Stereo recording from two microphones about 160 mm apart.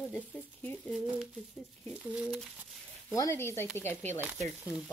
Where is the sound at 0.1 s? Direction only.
10° left (ahead or behind).